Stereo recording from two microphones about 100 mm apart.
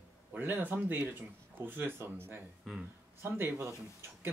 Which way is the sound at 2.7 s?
Centre (ahead or behind).